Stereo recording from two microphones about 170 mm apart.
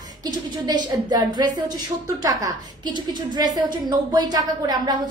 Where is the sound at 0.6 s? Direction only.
25° right (ahead or behind).